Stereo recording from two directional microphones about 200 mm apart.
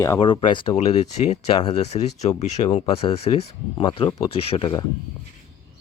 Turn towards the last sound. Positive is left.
turn(degrees=25)  # may be behind; listen again after turning